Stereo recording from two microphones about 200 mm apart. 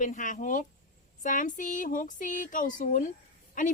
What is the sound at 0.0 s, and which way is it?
A woman's voice, 40° left (ahead or behind).